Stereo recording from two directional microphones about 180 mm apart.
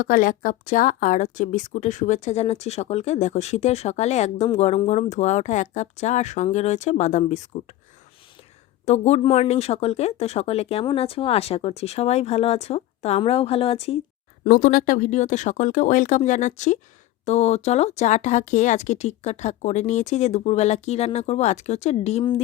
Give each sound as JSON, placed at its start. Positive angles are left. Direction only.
{"t": 0.0, "sound": "a woman's voice", "side_deg": 50}
{"t": 8.8, "sound": "a woman's voice", "side_deg": 40}
{"t": 14.4, "sound": "a woman's voice", "side_deg": 50}